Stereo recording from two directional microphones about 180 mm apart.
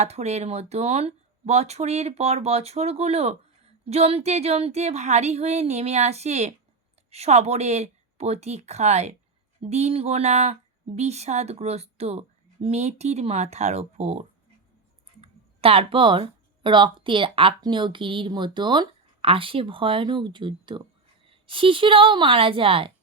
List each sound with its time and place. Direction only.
0.0 s a woman's voice: 35° right (ahead or behind)